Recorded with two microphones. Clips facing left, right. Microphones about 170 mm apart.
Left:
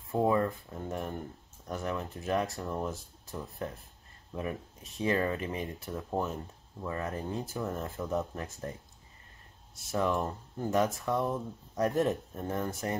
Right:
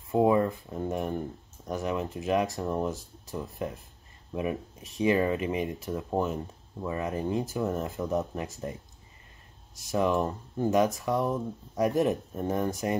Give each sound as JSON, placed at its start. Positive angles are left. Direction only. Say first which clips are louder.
{"t": 0.1, "sound": "speech", "louder": "right 4 dB", "side_deg": -15}
{"t": 9.8, "sound": "speech", "louder": "right 4 dB", "side_deg": -15}